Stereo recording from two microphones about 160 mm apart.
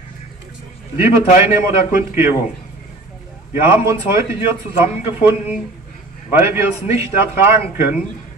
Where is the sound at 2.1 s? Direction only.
15° right (ahead or behind).